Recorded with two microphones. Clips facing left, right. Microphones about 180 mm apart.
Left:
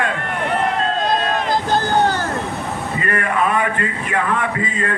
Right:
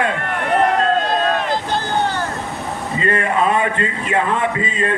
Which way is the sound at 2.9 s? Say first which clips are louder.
Right 3 dB; 25° right (ahead or behind).